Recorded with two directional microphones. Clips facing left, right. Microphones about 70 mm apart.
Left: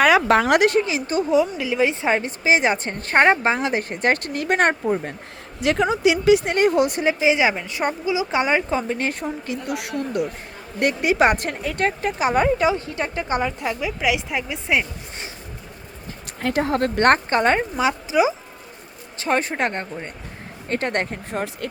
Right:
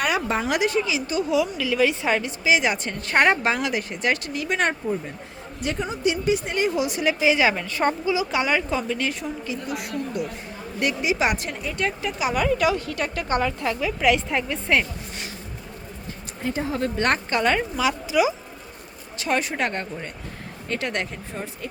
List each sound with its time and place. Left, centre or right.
0.3 s speech: left
0.8 s a woman's voice: left
5.5 s speech: left
6.5 s speech: left
7.0 s speech: left
9.5 s speech: left
10.8 s speech: left
11.8 s speech: left; by 14.8 s centre
16.4 s a woman's voice: left
20.7 s a woman's voice: left
21.3 s speech: left